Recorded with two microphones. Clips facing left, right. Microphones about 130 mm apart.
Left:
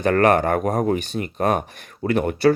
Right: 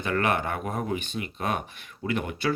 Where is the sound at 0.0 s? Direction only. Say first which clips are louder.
Left 9 dB; 45° left (ahead or behind).